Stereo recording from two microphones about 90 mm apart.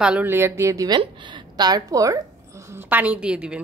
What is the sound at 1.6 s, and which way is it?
Speech, 45° right (ahead or behind).